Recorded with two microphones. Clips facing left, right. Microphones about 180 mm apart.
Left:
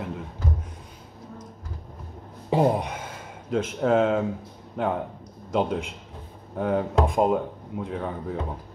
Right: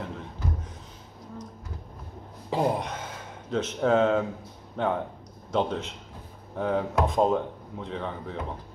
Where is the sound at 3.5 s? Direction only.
10° left (ahead or behind).